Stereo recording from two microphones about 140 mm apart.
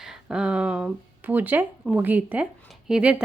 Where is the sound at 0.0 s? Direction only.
5° right (ahead or behind).